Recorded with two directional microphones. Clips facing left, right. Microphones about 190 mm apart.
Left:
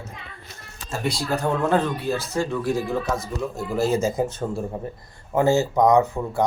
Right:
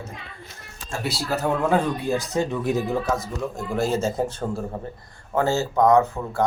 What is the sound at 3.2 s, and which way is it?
Speech, 5° left (ahead or behind).